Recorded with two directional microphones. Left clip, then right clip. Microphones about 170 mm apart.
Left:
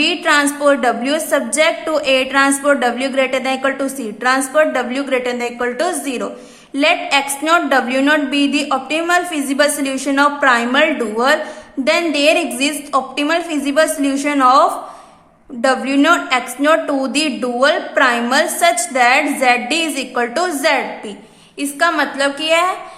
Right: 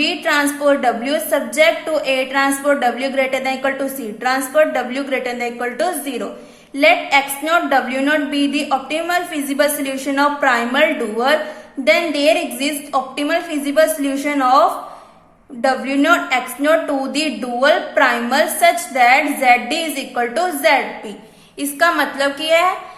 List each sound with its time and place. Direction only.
0.0 s a woman's voice: 15° left (ahead or behind)